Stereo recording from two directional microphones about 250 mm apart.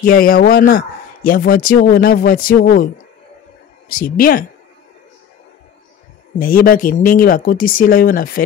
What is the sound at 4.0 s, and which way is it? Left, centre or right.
Speech, left.